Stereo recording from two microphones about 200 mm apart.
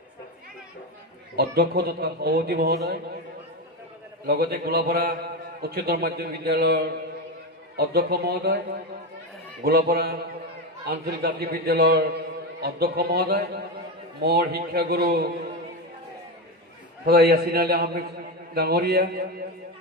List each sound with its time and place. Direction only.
1.3 s a man's voice: 50° right (ahead or behind)
4.3 s a man's voice: 50° right (ahead or behind)
17.0 s a man's voice: 50° right (ahead or behind)